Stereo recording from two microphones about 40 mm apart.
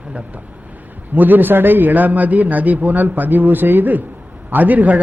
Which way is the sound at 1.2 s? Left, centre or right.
Right.